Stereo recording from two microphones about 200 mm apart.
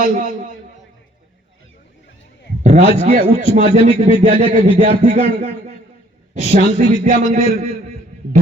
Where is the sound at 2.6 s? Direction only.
35° right (ahead or behind).